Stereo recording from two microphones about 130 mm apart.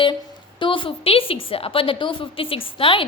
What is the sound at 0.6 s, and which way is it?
A woman's voice, 40° left (ahead or behind).